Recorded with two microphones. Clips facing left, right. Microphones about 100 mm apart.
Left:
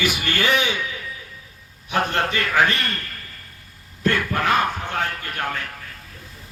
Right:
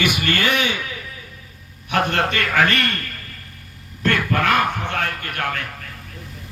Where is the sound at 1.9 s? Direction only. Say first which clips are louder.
Right 2 dB; 65° right (ahead or behind).